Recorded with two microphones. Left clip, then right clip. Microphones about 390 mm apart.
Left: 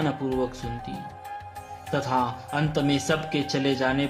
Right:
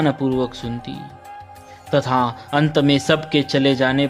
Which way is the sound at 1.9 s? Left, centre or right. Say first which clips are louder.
Right 7 dB; right.